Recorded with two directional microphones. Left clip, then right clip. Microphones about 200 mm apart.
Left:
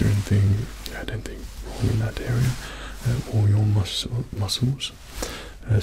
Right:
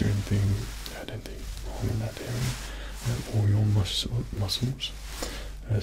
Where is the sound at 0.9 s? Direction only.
65° left (ahead or behind).